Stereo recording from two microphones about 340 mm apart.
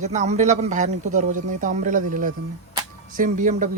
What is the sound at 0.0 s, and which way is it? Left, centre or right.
A man's voice, centre.